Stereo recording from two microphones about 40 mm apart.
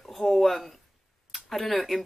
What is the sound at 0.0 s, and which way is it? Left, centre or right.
Speech, centre.